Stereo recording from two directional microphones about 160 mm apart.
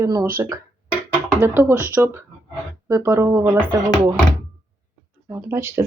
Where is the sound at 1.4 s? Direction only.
15° right (ahead or behind).